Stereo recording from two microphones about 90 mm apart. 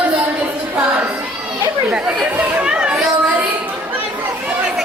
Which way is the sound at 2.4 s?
15° right (ahead or behind).